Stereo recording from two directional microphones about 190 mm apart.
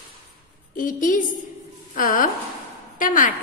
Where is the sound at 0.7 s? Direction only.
45° left (ahead or behind).